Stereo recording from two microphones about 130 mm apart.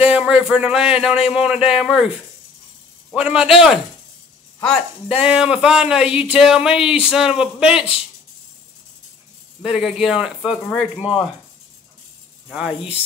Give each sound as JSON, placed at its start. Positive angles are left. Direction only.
{"t": 0.0, "sound": "speech", "side_deg": -10}
{"t": 3.2, "sound": "speech", "side_deg": -10}
{"t": 9.6, "sound": "speech", "side_deg": 0}
{"t": 12.4, "sound": "speech", "side_deg": -5}